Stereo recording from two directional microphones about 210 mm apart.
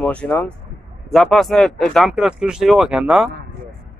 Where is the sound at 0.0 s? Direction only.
5° left (ahead or behind).